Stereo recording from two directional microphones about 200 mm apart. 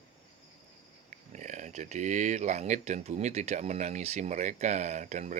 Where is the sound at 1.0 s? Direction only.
35° right (ahead or behind).